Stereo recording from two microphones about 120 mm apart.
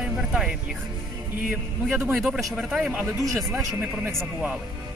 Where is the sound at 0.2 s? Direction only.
5° right (ahead or behind).